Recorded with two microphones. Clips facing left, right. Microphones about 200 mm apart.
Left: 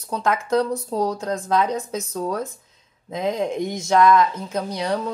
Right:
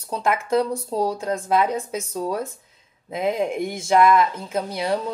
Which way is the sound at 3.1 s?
10° right (ahead or behind).